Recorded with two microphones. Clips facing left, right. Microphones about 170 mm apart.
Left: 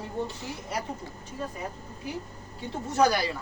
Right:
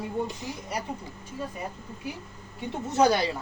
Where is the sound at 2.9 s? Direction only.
25° right (ahead or behind).